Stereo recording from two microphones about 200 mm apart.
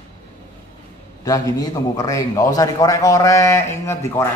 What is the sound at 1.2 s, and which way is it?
A man's voice, 20° left (ahead or behind).